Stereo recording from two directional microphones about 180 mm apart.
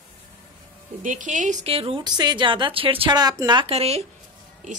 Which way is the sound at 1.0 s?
45° right (ahead or behind).